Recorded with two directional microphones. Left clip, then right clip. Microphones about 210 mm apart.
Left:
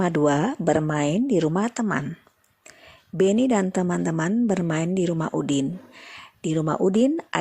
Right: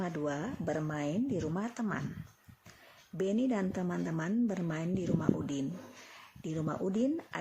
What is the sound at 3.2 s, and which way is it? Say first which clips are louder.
Speech: left 13 dB; 40° left (ahead or behind).